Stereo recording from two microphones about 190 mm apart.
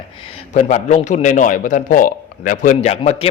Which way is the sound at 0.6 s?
40° left (ahead or behind).